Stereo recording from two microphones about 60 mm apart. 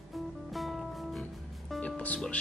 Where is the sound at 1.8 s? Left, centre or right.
Left.